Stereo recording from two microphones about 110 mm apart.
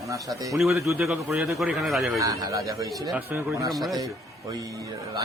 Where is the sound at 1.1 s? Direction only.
15° right (ahead or behind).